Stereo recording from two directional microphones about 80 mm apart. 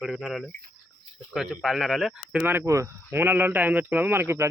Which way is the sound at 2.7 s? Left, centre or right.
Right.